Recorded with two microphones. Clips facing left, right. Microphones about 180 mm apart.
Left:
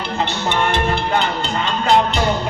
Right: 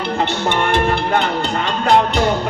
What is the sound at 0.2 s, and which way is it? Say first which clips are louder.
Music: even; 55° right (ahead or behind).